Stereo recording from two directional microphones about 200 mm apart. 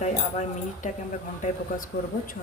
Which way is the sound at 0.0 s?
35° left (ahead or behind).